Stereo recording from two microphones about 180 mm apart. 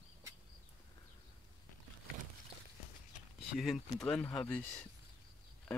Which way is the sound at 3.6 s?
Centre (ahead or behind).